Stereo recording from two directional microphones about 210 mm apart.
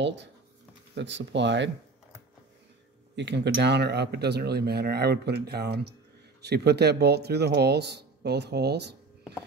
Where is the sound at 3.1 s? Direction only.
55° right (ahead or behind).